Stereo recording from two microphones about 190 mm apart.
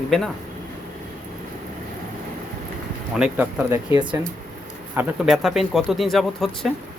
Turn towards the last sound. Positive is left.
turn(degrees=0)  # may be behind; listen again after turning